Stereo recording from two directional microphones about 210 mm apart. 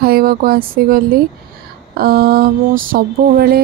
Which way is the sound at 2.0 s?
45° right (ahead or behind).